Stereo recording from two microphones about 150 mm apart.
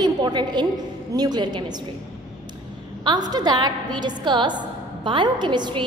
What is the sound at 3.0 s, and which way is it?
A woman's voice, 25° right (ahead or behind).